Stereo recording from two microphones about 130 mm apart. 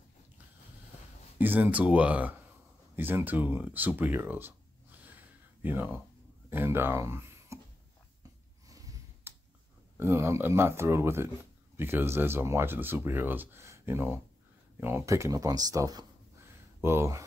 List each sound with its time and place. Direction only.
1.4 s speech: 15° right (ahead or behind)
5.6 s speech: 15° right (ahead or behind)
8.2 s a sound: 25° right (ahead or behind)
9.9 s speech: 20° right (ahead or behind)